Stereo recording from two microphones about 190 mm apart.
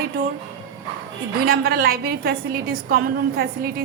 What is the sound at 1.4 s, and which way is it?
A woman's voice, 50° right (ahead or behind).